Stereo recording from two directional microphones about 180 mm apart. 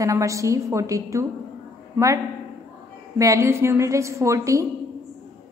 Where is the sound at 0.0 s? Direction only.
15° right (ahead or behind).